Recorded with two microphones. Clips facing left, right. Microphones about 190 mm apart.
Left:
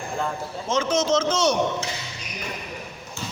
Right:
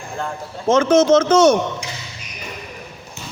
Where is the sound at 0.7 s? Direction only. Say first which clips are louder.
Right 9 dB; 55° right (ahead or behind).